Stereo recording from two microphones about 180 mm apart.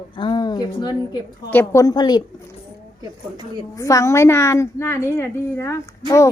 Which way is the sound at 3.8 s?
15° left (ahead or behind).